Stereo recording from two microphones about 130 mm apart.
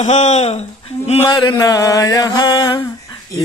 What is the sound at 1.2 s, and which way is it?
Mantra, 35° left (ahead or behind).